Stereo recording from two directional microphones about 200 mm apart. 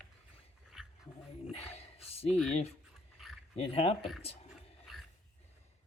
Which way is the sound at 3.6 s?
30° left (ahead or behind).